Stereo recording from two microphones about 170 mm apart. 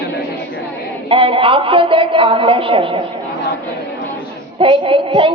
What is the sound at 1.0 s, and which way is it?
Speech, 30° right (ahead or behind).